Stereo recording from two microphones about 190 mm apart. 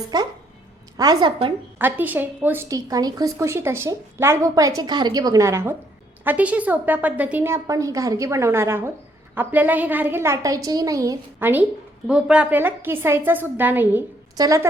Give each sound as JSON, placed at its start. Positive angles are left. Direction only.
{"t": 0.1, "sound": "a woman's voice", "side_deg": -20}
{"t": 1.8, "sound": "a woman's voice", "side_deg": -10}